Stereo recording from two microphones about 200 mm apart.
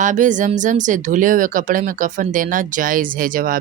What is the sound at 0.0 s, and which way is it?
Speech, 40° right (ahead or behind).